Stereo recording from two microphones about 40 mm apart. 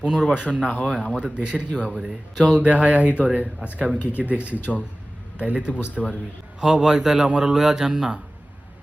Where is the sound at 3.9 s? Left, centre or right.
Left.